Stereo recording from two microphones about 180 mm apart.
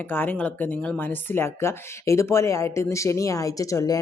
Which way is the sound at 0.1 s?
10° left (ahead or behind).